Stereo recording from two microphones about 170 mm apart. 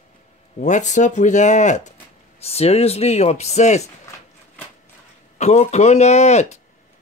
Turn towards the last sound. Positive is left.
turn(degrees=40)  # may be behind; listen again after turning